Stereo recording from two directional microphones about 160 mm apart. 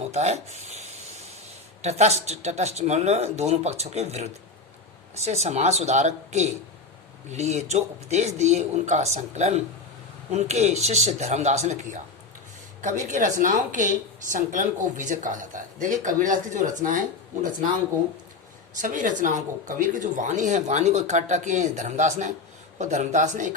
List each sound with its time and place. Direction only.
0.1 s a woman's voice: 45° right (ahead or behind)
18.8 s a woman's voice: 55° right (ahead or behind)